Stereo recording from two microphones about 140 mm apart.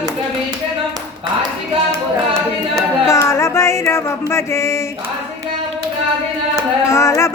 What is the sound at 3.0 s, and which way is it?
Music, 20° left (ahead or behind).